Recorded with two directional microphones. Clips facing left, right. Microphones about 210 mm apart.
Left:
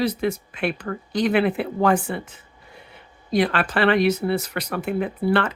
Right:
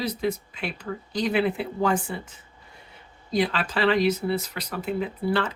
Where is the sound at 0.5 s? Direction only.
55° left (ahead or behind).